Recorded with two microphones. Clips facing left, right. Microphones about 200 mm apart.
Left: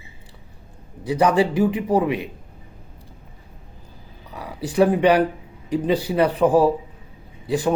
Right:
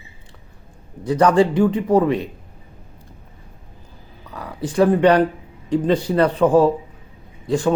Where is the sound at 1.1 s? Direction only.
10° left (ahead or behind).